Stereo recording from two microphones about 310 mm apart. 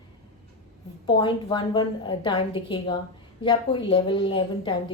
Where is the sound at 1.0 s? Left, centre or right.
Centre.